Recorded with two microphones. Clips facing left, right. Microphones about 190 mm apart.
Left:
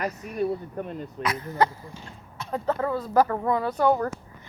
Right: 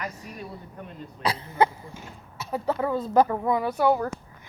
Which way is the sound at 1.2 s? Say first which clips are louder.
Right 1 dB; 30° right (ahead or behind).